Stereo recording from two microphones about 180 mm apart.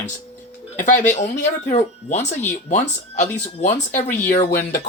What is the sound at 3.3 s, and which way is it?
Speech, 40° left (ahead or behind).